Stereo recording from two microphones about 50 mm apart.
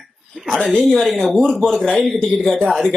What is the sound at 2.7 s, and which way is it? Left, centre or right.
Speech, centre.